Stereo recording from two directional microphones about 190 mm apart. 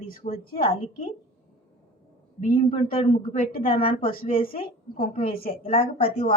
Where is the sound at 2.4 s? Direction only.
40° left (ahead or behind).